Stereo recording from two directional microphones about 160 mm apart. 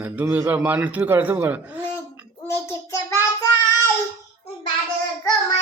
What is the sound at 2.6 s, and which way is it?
Child singing, 20° left (ahead or behind).